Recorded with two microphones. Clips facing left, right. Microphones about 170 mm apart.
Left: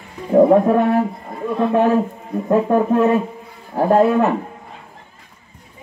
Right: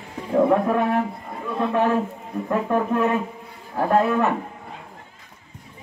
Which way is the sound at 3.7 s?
30° left (ahead or behind).